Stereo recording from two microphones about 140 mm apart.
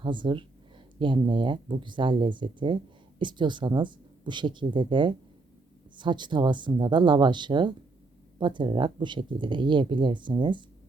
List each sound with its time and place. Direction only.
0.0 s speech: 35° right (ahead or behind)